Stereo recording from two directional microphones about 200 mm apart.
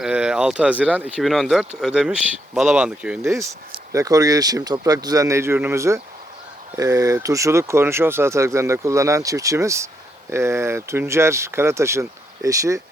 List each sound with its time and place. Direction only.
0.0 s speech: 5° right (ahead or behind)